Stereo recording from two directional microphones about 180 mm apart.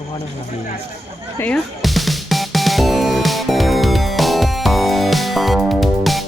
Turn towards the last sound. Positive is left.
turn(degrees=0)  # may be behind; listen again after turning